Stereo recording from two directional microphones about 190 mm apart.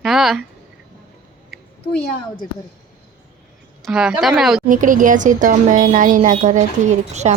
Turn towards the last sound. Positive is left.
turn(degrees=-35)  # may be behind; listen again after turning